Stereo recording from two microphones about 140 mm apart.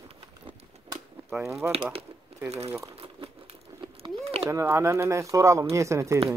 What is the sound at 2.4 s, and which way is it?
Speech, 50° right (ahead or behind).